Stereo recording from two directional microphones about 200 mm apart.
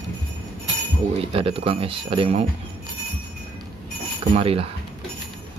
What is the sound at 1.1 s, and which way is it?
Speech, 30° right (ahead or behind).